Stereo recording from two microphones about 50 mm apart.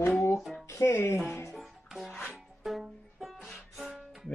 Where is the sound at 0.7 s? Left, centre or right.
Left.